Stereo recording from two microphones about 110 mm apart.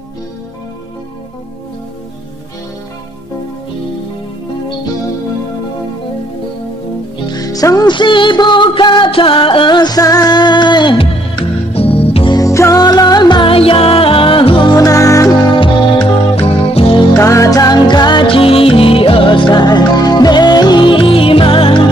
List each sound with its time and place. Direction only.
7.2 s music: 35° left (ahead or behind)
11.7 s music: 65° left (ahead or behind)
12.3 s music: 30° left (ahead or behind)
12.8 s music: 40° left (ahead or behind)
14.8 s music: 30° left (ahead or behind)
15.6 s music: 55° left (ahead or behind)
17.2 s music: 30° left (ahead or behind); by 21.7 s 55° left (ahead or behind)